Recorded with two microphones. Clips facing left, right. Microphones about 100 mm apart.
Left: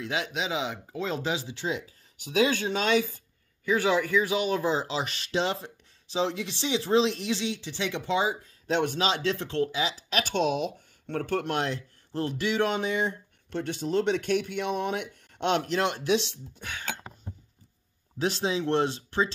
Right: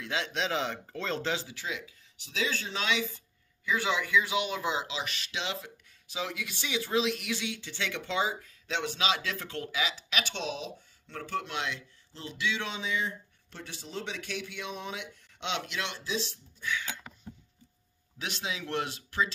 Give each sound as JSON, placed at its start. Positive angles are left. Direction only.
{"t": 0.0, "sound": "speech", "side_deg": 20}
{"t": 0.3, "sound": "speech", "side_deg": 5}
{"t": 1.5, "sound": "speech", "side_deg": 30}
{"t": 2.1, "sound": "speech", "side_deg": 55}
{"t": 8.6, "sound": "speech", "side_deg": 45}
{"t": 16.0, "sound": "speech", "side_deg": 80}
{"t": 16.7, "sound": "a sound", "side_deg": 50}
{"t": 18.2, "sound": "speech", "side_deg": 35}